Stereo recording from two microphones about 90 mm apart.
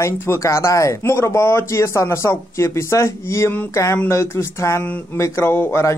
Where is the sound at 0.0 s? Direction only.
30° left (ahead or behind).